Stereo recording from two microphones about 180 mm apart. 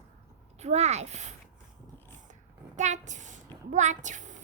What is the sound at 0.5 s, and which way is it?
Speech, 40° right (ahead or behind).